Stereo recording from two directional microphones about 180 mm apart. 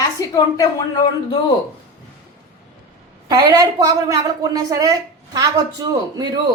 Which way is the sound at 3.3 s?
20° right (ahead or behind).